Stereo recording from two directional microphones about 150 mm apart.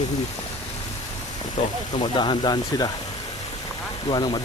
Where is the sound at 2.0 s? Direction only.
30° left (ahead or behind).